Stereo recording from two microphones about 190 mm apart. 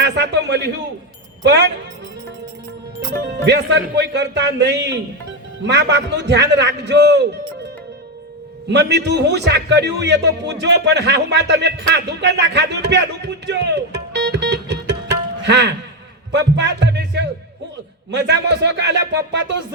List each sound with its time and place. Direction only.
0.0 s a sound: 65° right (ahead or behind)
1.5 s a man's voice: 65° right (ahead or behind)
3.4 s a man's voice: 65° right (ahead or behind)
8.6 s a man's voice: 65° right (ahead or behind)